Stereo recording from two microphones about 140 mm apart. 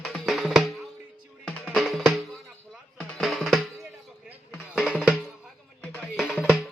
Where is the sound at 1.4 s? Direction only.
10° left (ahead or behind).